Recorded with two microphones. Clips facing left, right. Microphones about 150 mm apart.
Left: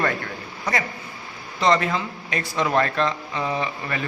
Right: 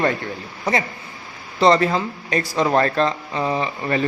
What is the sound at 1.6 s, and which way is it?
Speech, 35° right (ahead or behind).